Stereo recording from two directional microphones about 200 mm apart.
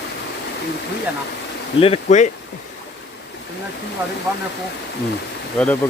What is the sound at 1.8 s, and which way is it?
Speech, 35° left (ahead or behind).